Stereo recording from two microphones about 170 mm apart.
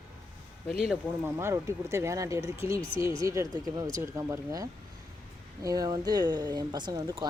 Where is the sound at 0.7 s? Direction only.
Centre (ahead or behind).